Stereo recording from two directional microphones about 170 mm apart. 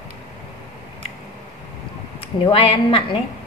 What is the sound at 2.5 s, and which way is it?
Speech, 35° left (ahead or behind).